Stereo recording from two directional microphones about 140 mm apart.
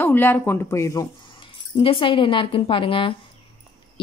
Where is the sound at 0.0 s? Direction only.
15° left (ahead or behind).